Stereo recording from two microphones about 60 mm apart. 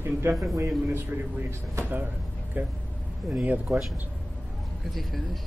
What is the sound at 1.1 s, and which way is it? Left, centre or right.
Speech, right.